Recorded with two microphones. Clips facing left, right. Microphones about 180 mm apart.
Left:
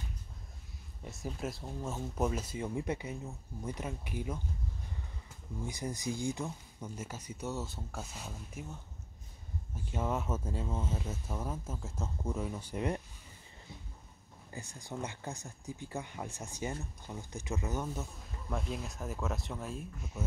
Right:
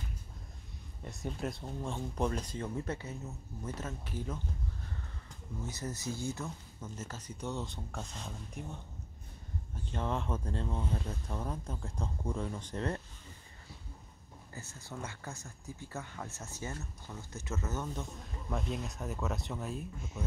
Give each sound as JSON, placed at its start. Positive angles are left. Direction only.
{"t": 1.0, "sound": "speech", "side_deg": 0}
{"t": 5.6, "sound": "speech", "side_deg": 15}
{"t": 9.8, "sound": "speech", "side_deg": 5}
{"t": 14.5, "sound": "speech", "side_deg": 15}